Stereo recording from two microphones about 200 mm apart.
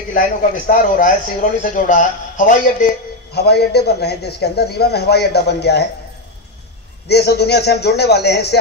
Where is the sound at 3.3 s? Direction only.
55° left (ahead or behind).